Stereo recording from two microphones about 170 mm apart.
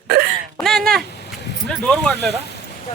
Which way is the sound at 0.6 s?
Centre (ahead or behind).